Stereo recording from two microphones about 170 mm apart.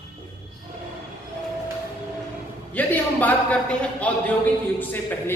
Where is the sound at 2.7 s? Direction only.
10° left (ahead or behind).